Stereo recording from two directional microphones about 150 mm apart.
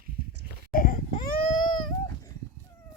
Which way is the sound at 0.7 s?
65° left (ahead or behind).